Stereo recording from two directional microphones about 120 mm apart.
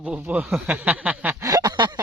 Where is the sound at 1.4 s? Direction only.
30° right (ahead or behind).